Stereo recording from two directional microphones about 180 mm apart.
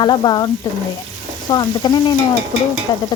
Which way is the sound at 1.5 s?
20° left (ahead or behind).